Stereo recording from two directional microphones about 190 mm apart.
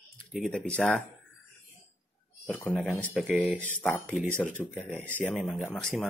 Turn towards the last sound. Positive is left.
turn(degrees=5)  # may be behind; listen again after turning